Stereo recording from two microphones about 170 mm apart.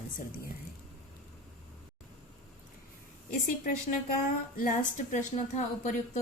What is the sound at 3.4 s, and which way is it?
A woman's voice, 55° left (ahead or behind).